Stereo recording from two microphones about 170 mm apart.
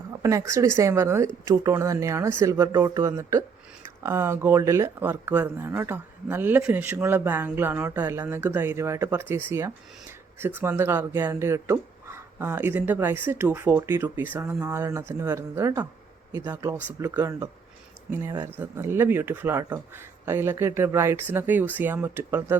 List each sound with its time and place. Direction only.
0.2 s speech: 20° right (ahead or behind)